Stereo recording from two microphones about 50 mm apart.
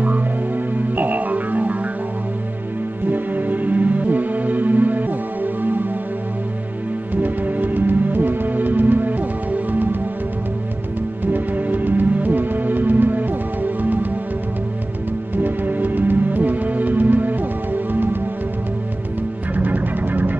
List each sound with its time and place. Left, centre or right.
0.7 s music: right
3.1 s music: right
7.2 s music: right
11.3 s music: right
15.3 s music: right
19.5 s music: right